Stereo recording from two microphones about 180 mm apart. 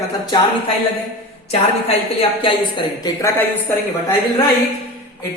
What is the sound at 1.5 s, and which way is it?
A woman's voice, 35° left (ahead or behind).